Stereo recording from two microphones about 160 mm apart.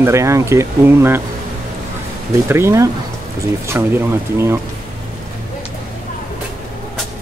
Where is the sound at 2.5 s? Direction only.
15° right (ahead or behind).